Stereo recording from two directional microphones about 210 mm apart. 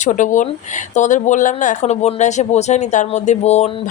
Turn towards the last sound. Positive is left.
turn(degrees=30)  # may be behind; listen again after turning